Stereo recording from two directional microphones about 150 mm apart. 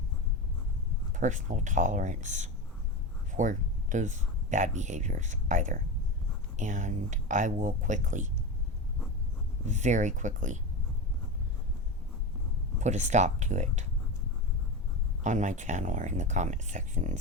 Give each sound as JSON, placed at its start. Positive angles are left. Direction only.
{"t": 1.1, "sound": "speech", "side_deg": -55}
{"t": 9.6, "sound": "speech", "side_deg": -55}
{"t": 12.8, "sound": "speech", "side_deg": -50}
{"t": 15.2, "sound": "speech", "side_deg": -55}